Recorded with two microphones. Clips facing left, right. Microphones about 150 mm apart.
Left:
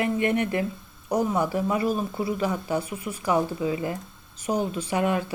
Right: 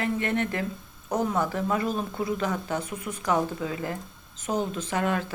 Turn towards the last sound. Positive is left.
turn(degrees=10)  # may be behind; listen again after turning